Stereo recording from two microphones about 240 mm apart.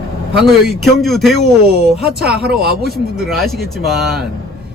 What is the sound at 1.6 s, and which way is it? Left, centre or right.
Speech, right.